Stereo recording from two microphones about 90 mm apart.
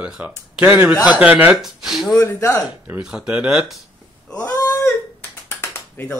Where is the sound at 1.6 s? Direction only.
Centre (ahead or behind).